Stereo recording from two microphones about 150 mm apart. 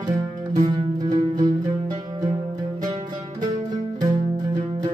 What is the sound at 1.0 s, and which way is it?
Music, 30° right (ahead or behind).